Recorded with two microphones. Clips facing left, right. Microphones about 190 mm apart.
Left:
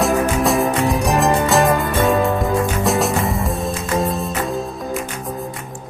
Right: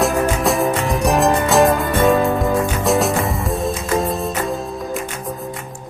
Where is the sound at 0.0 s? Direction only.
Centre (ahead or behind).